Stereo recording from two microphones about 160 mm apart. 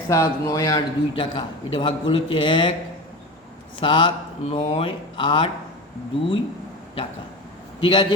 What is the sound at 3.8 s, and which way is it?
Speech, 30° left (ahead or behind).